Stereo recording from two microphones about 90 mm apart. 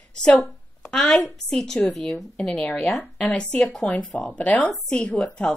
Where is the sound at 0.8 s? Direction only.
5° left (ahead or behind).